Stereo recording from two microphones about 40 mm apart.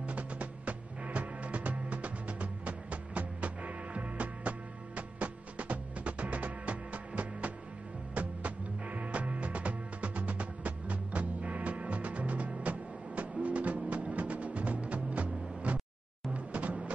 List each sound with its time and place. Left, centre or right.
0.0 s music: right
8.1 s music: right